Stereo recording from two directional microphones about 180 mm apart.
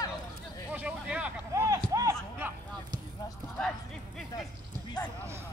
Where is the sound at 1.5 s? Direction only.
15° right (ahead or behind).